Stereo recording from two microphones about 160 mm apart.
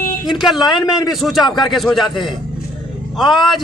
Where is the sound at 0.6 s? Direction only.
25° left (ahead or behind).